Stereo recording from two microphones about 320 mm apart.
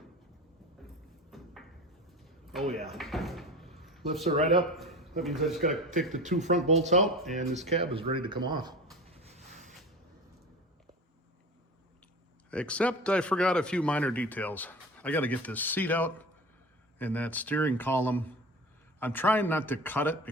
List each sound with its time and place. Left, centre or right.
1.3 s a sound: centre
2.7 s drawer open or close: centre
4.5 s a man's voice: centre
6.2 s speech: right
7.0 s speech: centre
7.3 s speech: right
8.9 s a sound: centre
12.5 s speech: centre